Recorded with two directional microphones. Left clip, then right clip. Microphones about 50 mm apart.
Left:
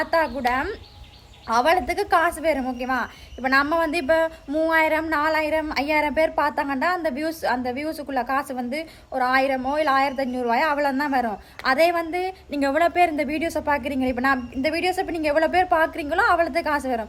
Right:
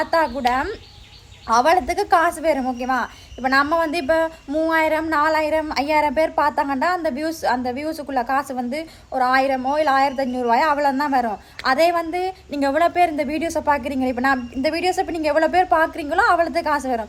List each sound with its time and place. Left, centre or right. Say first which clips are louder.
0.0 s a woman's voice: right 3 dB; left